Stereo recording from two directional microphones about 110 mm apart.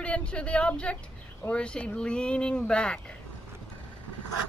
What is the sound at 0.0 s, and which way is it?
Speech, 10° left (ahead or behind).